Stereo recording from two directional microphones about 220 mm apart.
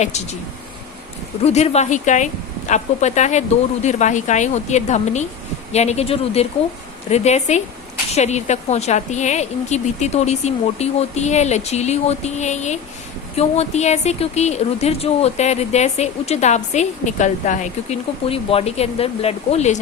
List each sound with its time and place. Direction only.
0.0 s a woman's voice: 30° left (ahead or behind)
1.4 s a woman's voice: 30° left (ahead or behind)